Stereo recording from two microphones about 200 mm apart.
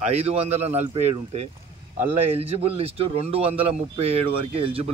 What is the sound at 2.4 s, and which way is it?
Speech, 30° right (ahead or behind).